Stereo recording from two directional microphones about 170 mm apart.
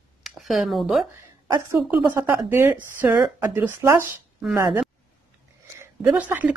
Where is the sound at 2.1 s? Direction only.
15° right (ahead or behind).